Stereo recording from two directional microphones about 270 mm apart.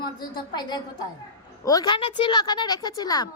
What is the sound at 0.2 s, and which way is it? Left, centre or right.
A woman's voice, centre.